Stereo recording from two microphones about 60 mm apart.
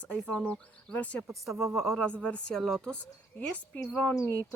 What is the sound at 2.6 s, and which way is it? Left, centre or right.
Speech, centre.